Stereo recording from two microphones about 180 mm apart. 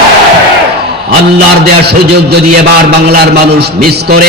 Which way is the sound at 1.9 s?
65° right (ahead or behind).